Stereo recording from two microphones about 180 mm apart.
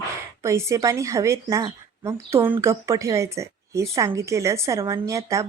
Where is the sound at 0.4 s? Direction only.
15° right (ahead or behind).